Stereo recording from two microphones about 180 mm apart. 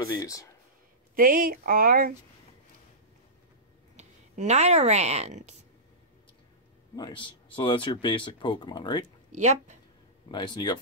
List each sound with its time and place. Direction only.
0.1 s speech: 20° left (ahead or behind)
1.1 s speech: 50° right (ahead or behind)
3.9 s speech: 40° right (ahead or behind)
7.0 s speech: 25° left (ahead or behind)
9.0 s speech: 40° right (ahead or behind)
10.3 s speech: 25° left (ahead or behind)